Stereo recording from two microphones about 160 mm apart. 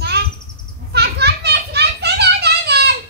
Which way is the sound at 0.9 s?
90° right.